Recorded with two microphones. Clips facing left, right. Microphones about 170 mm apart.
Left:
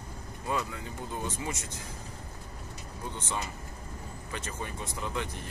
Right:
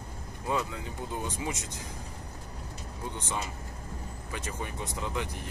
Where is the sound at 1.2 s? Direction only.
15° right (ahead or behind).